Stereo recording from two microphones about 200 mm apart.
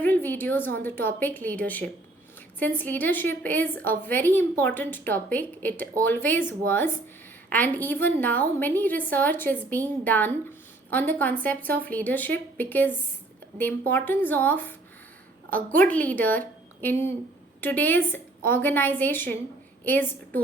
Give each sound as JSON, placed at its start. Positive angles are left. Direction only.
{"t": 0.0, "sound": "a woman's voice", "side_deg": 10}
{"t": 15.4, "sound": "a woman's voice", "side_deg": -45}
{"t": 15.8, "sound": "a woman's voice", "side_deg": 5}